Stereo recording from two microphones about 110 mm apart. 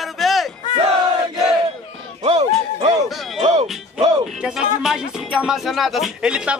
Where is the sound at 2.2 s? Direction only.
70° right (ahead or behind).